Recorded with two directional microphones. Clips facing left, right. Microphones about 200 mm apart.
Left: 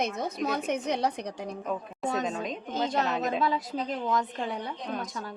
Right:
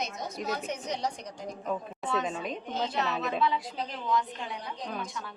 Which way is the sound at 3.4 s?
40° left (ahead or behind).